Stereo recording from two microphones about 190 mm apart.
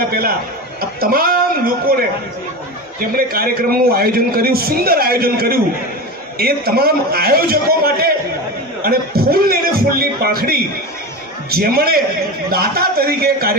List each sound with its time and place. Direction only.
0.1 s a man's voice: 50° right (ahead or behind)
3.1 s a man's voice: 50° right (ahead or behind)